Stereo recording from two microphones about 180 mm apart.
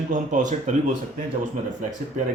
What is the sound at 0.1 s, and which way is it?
Speech, 45° right (ahead or behind).